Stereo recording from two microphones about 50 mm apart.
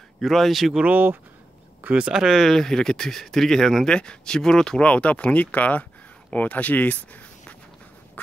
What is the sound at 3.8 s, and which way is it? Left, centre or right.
Speech, centre.